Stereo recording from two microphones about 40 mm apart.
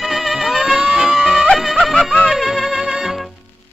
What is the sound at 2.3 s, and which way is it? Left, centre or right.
Music, centre.